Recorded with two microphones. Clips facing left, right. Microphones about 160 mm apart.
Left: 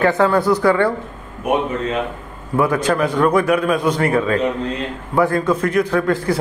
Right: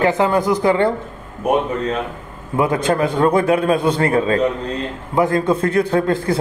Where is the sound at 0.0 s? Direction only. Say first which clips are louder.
Left 1 dB; 20° right (ahead or behind).